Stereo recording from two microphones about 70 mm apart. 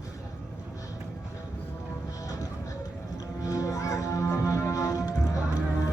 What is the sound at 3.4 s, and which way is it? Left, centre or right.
Music, left.